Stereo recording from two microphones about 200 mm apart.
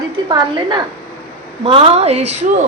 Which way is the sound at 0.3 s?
20° right (ahead or behind).